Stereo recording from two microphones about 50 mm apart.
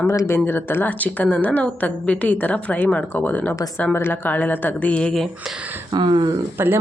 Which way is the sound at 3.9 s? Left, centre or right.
Left.